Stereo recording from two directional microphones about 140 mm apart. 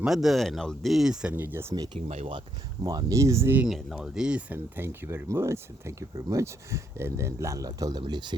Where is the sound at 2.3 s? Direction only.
30° right (ahead or behind).